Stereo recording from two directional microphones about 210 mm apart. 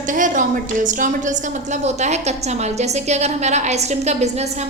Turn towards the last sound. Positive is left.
turn(degrees=-30)  # may be behind; listen again after turning